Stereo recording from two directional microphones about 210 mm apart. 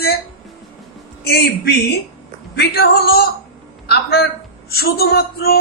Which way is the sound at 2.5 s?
50° left (ahead or behind).